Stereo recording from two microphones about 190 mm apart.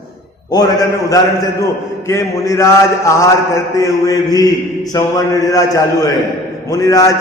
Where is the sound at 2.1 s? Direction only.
15° left (ahead or behind).